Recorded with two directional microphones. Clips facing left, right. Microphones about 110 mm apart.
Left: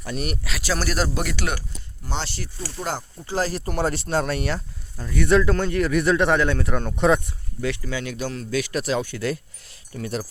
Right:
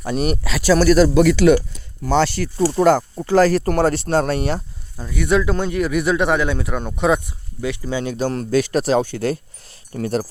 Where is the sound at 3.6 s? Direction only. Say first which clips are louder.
Right 7 dB; 70° right (ahead or behind).